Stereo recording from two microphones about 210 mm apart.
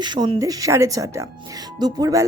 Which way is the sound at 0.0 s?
20° right (ahead or behind).